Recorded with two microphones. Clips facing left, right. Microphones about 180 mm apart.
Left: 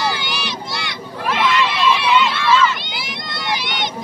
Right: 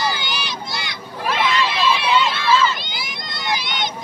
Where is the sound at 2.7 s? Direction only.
70° left (ahead or behind).